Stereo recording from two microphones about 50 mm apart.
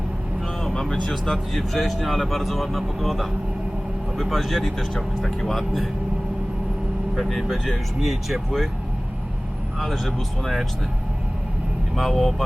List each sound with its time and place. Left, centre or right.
0.6 s vehicle: centre
1.1 s speech: centre
7.2 s speech: centre
9.7 s speech: centre
11.9 s speech: centre